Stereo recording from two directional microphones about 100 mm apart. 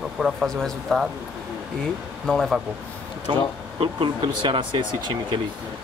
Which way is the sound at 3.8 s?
55° right (ahead or behind).